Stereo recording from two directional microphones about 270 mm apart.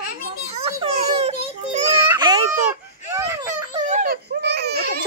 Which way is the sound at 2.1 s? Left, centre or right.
Centre.